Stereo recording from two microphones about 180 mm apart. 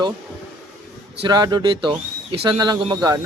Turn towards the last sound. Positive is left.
turn(degrees=-20)  # may be behind; listen again after turning